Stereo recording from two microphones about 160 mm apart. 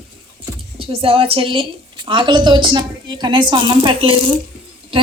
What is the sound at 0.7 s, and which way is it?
A woman's voice, 35° right (ahead or behind).